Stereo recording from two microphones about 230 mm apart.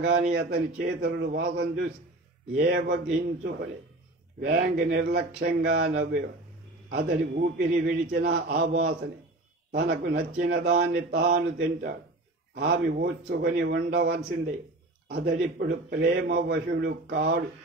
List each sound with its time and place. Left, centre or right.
0.3 s a man's voice: right
4.7 s a man's voice: right
10.5 s a man's voice: right